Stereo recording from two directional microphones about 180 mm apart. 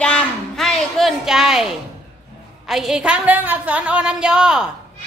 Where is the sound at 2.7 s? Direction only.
5° right (ahead or behind).